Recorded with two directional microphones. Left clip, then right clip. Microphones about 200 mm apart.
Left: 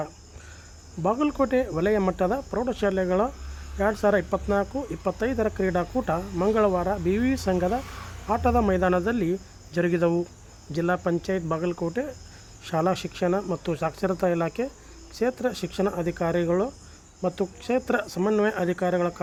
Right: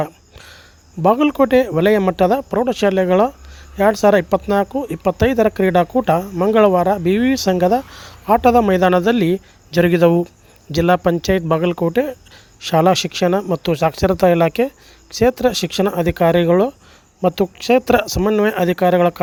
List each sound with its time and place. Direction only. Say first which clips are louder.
1.0 s speech: right 10 dB; 35° right (ahead or behind)